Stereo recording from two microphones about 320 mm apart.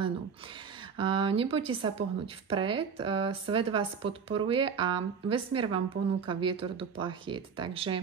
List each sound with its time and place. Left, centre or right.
0.9 s speech: centre